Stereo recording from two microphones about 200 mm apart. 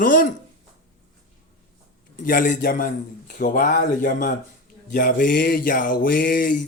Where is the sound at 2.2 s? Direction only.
45° left (ahead or behind).